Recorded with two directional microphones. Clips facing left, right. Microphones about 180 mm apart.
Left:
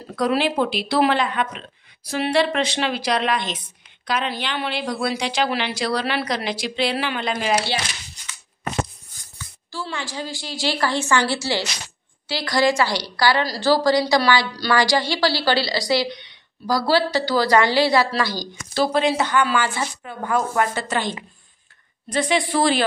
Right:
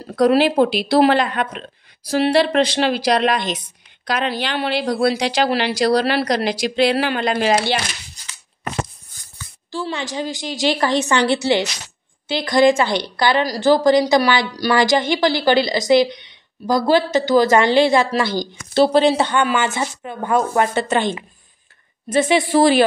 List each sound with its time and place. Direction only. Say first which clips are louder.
0.1 s speech: right 6 dB; 40° right (ahead or behind)
8.2 s a sound: even; 35° right (ahead or behind)
9.7 s a woman's voice: right 5 dB; 20° right (ahead or behind)
22.1 s a woman's voice: right 5 dB; 20° right (ahead or behind)